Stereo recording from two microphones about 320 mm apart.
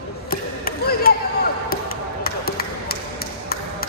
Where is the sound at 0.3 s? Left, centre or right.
Left.